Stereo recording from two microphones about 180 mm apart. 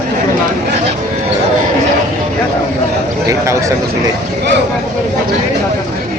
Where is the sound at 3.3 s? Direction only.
15° right (ahead or behind).